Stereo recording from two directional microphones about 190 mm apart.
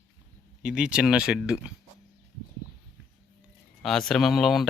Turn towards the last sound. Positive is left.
turn(degrees=0)  # may be behind; listen again after turning